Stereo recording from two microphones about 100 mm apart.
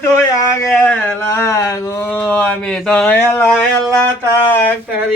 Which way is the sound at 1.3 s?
30° left (ahead or behind).